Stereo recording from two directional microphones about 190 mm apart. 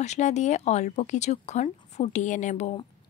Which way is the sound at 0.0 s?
35° left (ahead or behind).